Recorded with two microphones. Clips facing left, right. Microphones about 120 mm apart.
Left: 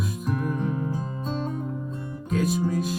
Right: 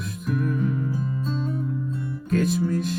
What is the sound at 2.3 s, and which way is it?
Music, 5° left (ahead or behind).